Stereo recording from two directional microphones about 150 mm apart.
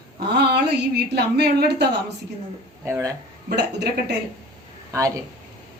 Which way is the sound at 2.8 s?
15° right (ahead or behind).